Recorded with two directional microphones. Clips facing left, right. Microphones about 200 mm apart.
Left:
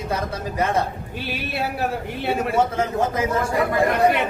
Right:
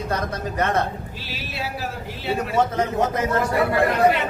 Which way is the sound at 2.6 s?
10° left (ahead or behind).